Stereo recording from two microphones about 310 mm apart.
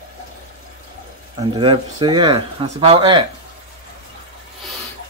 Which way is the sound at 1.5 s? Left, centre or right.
Centre.